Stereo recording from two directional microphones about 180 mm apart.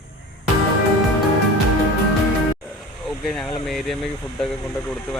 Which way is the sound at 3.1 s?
Centre (ahead or behind).